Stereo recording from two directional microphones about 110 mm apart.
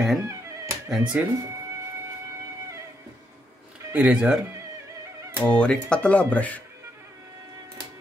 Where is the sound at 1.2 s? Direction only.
15° right (ahead or behind).